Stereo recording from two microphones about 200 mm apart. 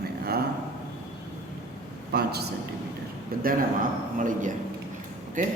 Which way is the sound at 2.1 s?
50° right (ahead or behind).